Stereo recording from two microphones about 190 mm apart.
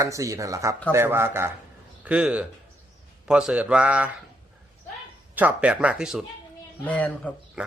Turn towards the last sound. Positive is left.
turn(degrees=5)  # may be behind; listen again after turning